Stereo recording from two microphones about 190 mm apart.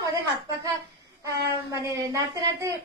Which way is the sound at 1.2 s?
15° right (ahead or behind).